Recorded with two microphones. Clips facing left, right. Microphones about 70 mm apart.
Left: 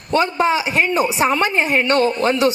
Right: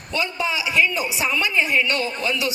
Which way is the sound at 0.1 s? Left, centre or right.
Left.